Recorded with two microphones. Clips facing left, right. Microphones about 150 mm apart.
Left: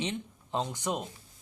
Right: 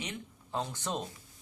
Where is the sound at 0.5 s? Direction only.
15° left (ahead or behind).